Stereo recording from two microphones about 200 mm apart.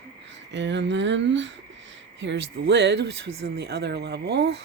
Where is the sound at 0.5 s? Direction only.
60° right (ahead or behind).